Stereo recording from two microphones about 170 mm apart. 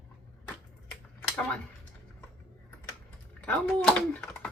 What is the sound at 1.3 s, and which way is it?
Speech, 5° left (ahead or behind).